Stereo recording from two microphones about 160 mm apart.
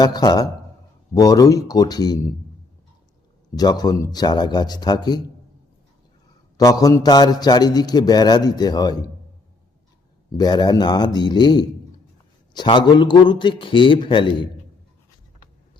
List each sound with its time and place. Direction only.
0.0 s a man's voice: 25° left (ahead or behind)
3.5 s a man's voice: 25° left (ahead or behind)
6.6 s a man's voice: 20° left (ahead or behind)
10.3 s a man's voice: 25° left (ahead or behind)